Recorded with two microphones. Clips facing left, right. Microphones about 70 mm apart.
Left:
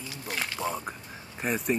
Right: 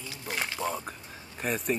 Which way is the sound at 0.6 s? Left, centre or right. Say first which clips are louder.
Left 1 dB; centre.